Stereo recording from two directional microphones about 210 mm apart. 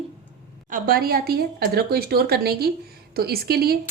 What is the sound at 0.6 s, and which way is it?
A woman's voice, 40° right (ahead or behind).